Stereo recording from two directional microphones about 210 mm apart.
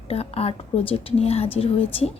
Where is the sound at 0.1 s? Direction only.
30° left (ahead or behind).